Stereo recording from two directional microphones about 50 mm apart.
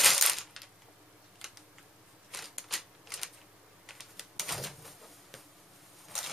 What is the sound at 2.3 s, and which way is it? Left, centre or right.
Typewriter, centre.